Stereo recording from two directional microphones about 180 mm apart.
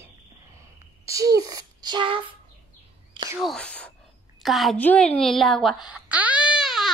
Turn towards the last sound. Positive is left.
turn(degrees=0)  # may be behind; listen again after turning